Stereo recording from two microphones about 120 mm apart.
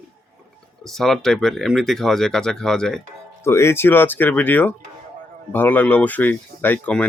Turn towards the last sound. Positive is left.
turn(degrees=10)  # may be behind; listen again after turning